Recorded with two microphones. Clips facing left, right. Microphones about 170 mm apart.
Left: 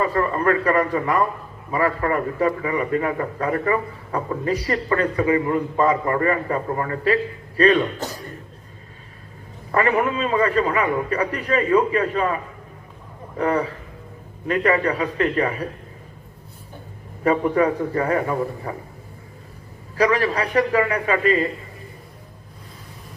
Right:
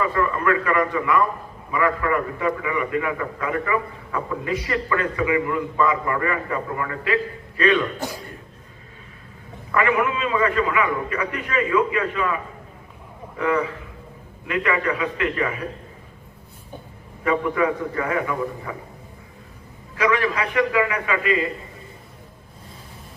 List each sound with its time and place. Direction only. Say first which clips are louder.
0.0 s a man's voice: left 2 dB; 40° left (ahead or behind)
7.9 s speech: even; 10° right (ahead or behind)
9.7 s a man's voice: left 1 dB; 40° left (ahead or behind)
17.2 s a man's voice: left 3 dB; 40° left (ahead or behind)
20.0 s a man's voice: left 2 dB; 35° left (ahead or behind)